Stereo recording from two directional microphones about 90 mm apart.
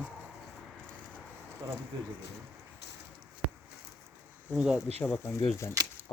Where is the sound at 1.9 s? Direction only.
55° right (ahead or behind).